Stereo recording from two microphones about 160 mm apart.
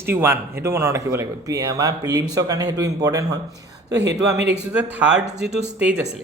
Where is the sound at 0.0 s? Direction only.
15° right (ahead or behind).